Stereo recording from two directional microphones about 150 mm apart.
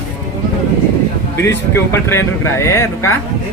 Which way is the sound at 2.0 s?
15° left (ahead or behind).